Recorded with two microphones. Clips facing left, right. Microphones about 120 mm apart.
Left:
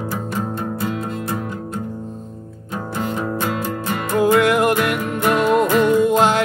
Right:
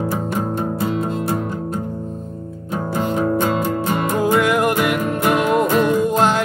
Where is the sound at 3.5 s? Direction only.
25° right (ahead or behind).